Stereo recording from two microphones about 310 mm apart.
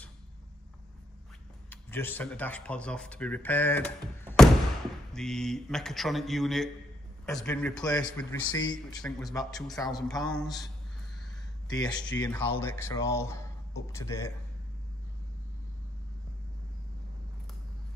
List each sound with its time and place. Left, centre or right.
1.7 s a man's voice: centre
8.5 s a man's voice: left
9.0 s a man's voice: centre
11.7 s speech: centre